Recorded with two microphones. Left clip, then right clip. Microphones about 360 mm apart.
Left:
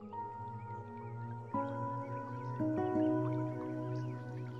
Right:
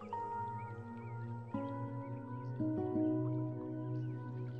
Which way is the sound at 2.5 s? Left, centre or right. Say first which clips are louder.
Left 3 dB; left.